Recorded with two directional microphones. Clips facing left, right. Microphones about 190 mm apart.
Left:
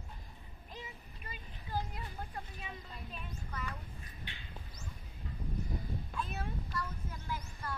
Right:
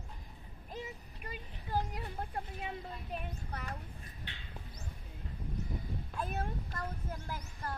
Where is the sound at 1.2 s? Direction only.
60° right (ahead or behind).